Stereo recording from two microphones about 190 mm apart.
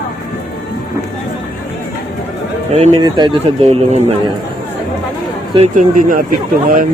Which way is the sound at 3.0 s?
20° right (ahead or behind).